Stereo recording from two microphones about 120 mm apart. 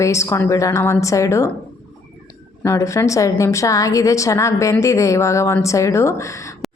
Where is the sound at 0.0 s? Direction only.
25° left (ahead or behind).